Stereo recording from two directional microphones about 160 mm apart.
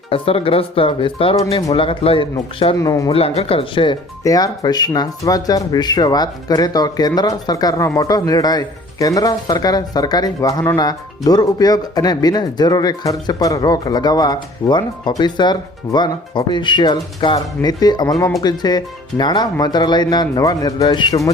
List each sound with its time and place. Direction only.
0.1 s speech: 35° left (ahead or behind)
2.7 s speech: 20° left (ahead or behind)
3.1 s speech: 35° left (ahead or behind)
4.2 s speech: 20° left (ahead or behind)